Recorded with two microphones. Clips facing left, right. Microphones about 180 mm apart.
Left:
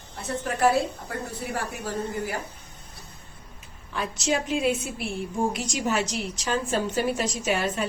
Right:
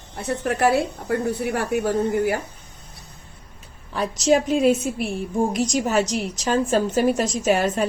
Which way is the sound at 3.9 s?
40° right (ahead or behind).